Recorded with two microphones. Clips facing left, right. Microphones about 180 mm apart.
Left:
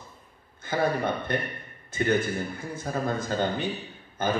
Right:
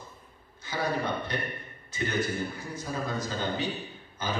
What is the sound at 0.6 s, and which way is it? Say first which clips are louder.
A man's voice: left 4 dB; 55° left (ahead or behind).